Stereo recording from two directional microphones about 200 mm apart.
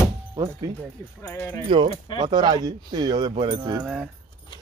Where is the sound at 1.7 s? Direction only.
25° right (ahead or behind).